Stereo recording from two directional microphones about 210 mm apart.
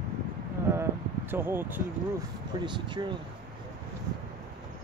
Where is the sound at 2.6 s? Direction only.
20° right (ahead or behind).